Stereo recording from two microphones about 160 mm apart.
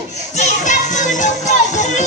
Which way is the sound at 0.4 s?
50° left (ahead or behind).